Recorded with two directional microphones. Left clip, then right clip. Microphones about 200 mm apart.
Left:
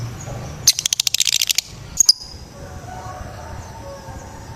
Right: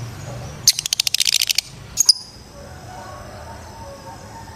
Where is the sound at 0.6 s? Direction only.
20° left (ahead or behind).